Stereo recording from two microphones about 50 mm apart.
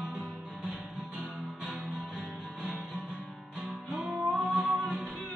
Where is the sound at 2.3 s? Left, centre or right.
Right.